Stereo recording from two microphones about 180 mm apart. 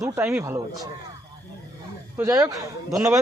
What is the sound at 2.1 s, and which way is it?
Speech, 15° right (ahead or behind).